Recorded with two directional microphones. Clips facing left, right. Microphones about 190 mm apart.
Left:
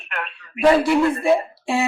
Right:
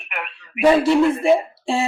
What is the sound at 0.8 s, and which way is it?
Speech, 25° right (ahead or behind).